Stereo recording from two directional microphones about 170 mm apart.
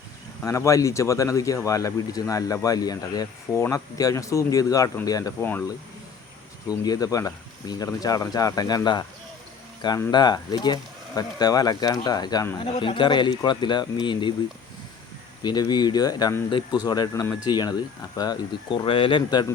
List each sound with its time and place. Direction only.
0.4 s speech: 20° left (ahead or behind)
6.8 s speech: 20° left (ahead or behind)
10.1 s speech: 25° left (ahead or behind)
15.4 s speech: 25° left (ahead or behind)